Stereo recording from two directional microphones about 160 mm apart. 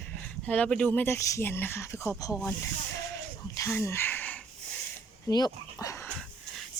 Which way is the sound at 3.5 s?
15° left (ahead or behind).